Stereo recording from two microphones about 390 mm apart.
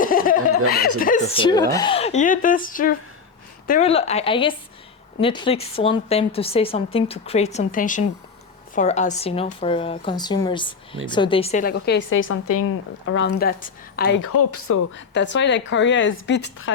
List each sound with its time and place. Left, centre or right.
0.0 s a sound: left
0.9 s a woman's voice: centre
14.3 s a woman's voice: left